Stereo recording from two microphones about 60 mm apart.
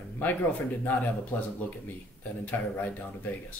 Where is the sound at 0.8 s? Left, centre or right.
Left.